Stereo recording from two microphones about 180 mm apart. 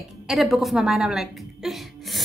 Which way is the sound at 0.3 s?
Centre (ahead or behind).